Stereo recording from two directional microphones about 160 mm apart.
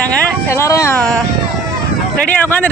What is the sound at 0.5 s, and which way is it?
Speech, 20° left (ahead or behind).